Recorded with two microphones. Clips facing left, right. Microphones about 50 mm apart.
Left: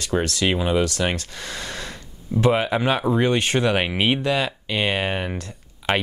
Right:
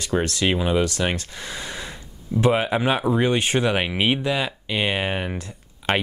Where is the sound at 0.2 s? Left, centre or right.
Right.